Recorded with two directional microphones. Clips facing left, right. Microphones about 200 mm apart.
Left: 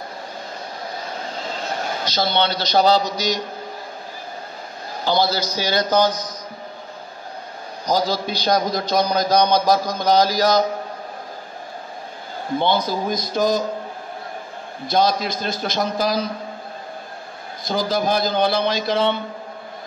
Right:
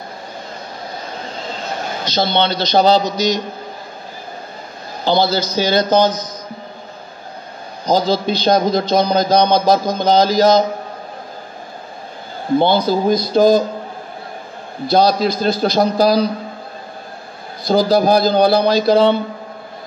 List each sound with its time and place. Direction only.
2.0 s a man's voice: 20° right (ahead or behind)
5.0 s a man's voice: 25° right (ahead or behind)
7.8 s a man's voice: 25° right (ahead or behind)
12.5 s a man's voice: 30° right (ahead or behind)
14.9 s a man's voice: 35° right (ahead or behind)
17.6 s a man's voice: 35° right (ahead or behind)